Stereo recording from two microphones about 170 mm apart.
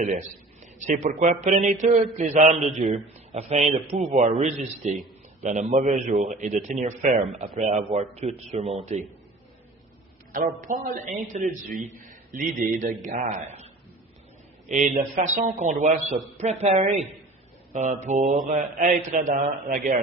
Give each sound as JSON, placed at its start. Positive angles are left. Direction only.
{"t": 0.0, "sound": "a man's voice", "side_deg": -45}
{"t": 10.3, "sound": "a man's voice", "side_deg": -50}
{"t": 14.7, "sound": "a man's voice", "side_deg": -45}